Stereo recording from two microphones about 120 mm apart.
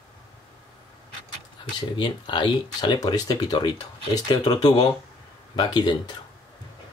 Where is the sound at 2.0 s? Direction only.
40° left (ahead or behind).